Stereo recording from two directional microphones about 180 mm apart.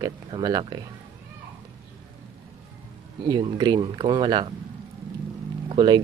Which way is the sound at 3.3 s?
25° right (ahead or behind).